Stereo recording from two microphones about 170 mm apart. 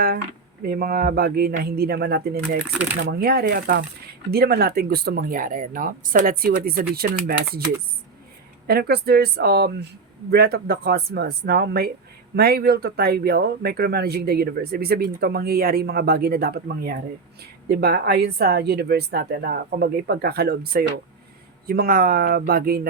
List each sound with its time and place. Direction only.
0.6 s speech: 65° right (ahead or behind)
8.6 s speech: 65° right (ahead or behind)